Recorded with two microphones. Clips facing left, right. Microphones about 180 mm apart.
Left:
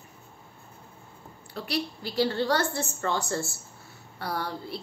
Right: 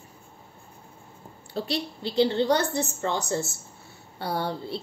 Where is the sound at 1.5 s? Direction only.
25° right (ahead or behind).